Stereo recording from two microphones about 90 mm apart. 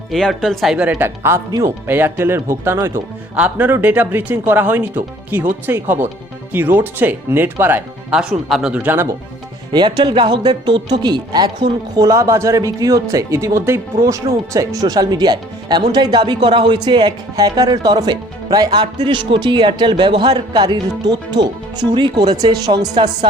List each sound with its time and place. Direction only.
0.1 s speech: 5° left (ahead or behind)
0.9 s speech: 20° right (ahead or behind)
3.3 s speech: 15° right (ahead or behind)
8.1 s speech: 5° right (ahead or behind)
8.7 s speech: 15° right (ahead or behind)
9.7 s speech: 55° right (ahead or behind)
11.9 s speech: 40° right (ahead or behind); by 23.3 s 55° right (ahead or behind)